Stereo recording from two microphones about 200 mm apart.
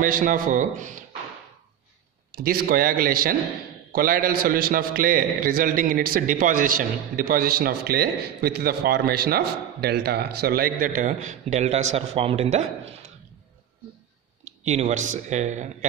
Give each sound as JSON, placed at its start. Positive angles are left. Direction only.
{"t": 0.0, "sound": "speech", "side_deg": -45}
{"t": 2.3, "sound": "a man's voice", "side_deg": -45}
{"t": 14.6, "sound": "speech", "side_deg": -35}